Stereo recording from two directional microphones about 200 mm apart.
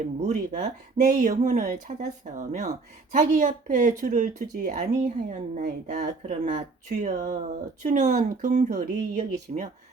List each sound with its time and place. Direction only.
0.2 s speech: 35° right (ahead or behind)